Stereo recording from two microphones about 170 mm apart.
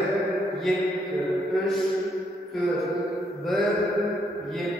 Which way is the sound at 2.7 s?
Centre (ahead or behind).